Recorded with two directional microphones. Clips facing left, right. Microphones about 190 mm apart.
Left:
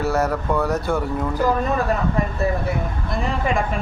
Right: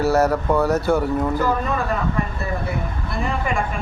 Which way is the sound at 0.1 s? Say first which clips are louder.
Right 3 dB; centre (ahead or behind).